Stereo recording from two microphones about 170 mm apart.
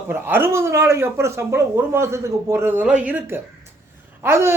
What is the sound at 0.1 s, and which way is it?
Speech, 10° right (ahead or behind).